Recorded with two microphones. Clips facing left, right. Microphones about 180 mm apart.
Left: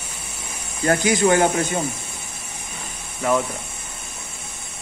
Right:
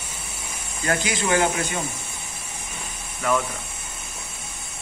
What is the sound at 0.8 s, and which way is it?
Speech, 45° left (ahead or behind).